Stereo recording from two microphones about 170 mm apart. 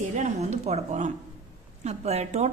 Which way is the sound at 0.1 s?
45° right (ahead or behind).